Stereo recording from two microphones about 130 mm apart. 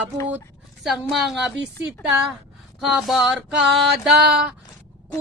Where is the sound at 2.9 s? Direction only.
Centre (ahead or behind).